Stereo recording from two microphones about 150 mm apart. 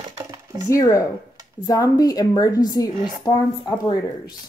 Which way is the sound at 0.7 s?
20° left (ahead or behind).